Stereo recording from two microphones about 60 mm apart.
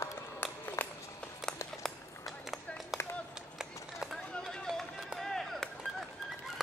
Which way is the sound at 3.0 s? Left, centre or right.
Left.